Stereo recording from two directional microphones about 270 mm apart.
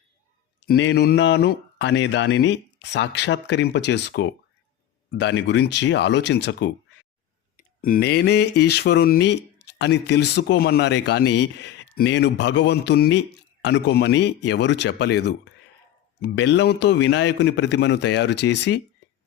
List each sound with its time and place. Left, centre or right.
0.6 s speech: left